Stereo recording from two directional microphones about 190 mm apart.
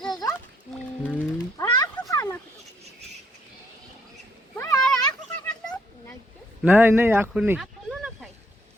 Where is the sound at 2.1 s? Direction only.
20° left (ahead or behind).